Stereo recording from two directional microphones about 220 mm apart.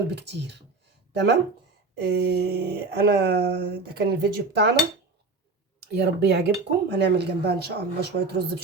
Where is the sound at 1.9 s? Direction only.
45° right (ahead or behind).